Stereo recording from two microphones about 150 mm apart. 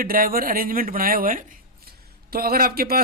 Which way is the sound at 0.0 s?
70° right (ahead or behind).